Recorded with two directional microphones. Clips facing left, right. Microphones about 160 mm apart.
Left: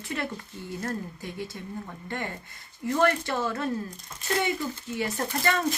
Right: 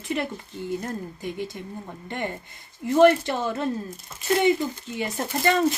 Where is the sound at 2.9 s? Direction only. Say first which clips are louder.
Right 7 dB; 20° right (ahead or behind).